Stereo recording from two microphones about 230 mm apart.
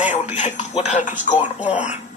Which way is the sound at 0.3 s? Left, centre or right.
Left.